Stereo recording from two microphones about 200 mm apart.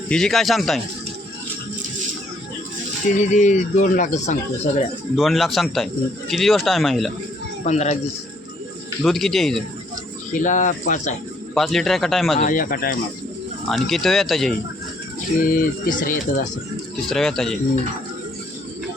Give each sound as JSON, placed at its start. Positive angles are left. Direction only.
{"t": 0.1, "sound": "speech", "side_deg": 0}
{"t": 3.3, "sound": "speech", "side_deg": 40}
{"t": 5.1, "sound": "speech", "side_deg": 0}
{"t": 7.6, "sound": "speech", "side_deg": 35}
{"t": 9.0, "sound": "speech", "side_deg": 0}
{"t": 10.3, "sound": "speech", "side_deg": 40}
{"t": 11.5, "sound": "speech", "side_deg": 0}
{"t": 12.4, "sound": "speech", "side_deg": 45}
{"t": 13.7, "sound": "speech", "side_deg": 0}
{"t": 15.5, "sound": "speech", "side_deg": 45}
{"t": 17.1, "sound": "speech", "side_deg": 0}